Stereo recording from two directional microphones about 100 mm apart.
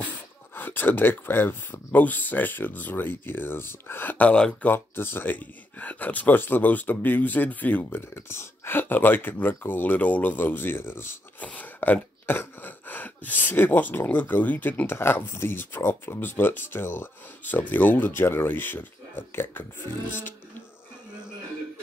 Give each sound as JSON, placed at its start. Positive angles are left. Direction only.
{"t": 0.6, "sound": "speech", "side_deg": 20}